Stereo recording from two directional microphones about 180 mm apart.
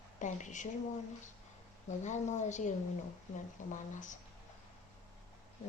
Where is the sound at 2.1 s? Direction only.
40° left (ahead or behind).